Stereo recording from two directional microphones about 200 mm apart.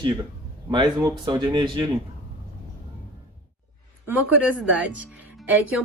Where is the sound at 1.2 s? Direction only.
20° right (ahead or behind).